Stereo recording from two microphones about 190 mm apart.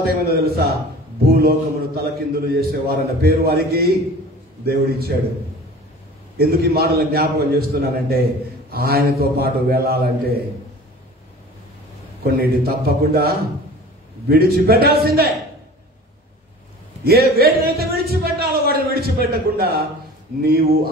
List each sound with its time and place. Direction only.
0.2 s a man's voice: 55° right (ahead or behind)
6.3 s a man's voice: 55° right (ahead or behind)
12.3 s a man's voice: 55° right (ahead or behind)
17.0 s a man's voice: 55° right (ahead or behind)